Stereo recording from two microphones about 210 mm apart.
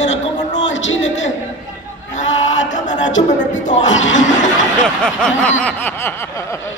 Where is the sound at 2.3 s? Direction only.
65° left (ahead or behind).